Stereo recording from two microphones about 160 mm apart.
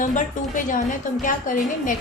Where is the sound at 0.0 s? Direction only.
50° left (ahead or behind).